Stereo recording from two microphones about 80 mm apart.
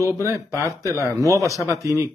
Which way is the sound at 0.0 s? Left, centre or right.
Right.